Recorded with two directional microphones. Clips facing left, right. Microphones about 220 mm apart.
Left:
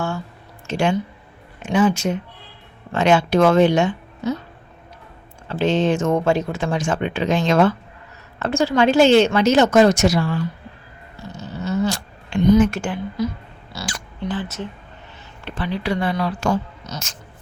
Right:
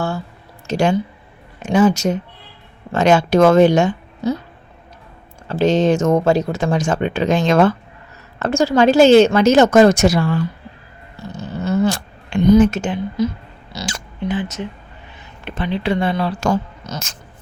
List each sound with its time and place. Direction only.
0.7 s speech: 40° right (ahead or behind)
5.5 s speech: 40° right (ahead or behind)
11.6 s cat: 55° right (ahead or behind)
12.7 s speech: 20° right (ahead or behind)
13.7 s oink: 20° right (ahead or behind)
15.4 s speech: 20° right (ahead or behind)
16.4 s speech: 45° right (ahead or behind)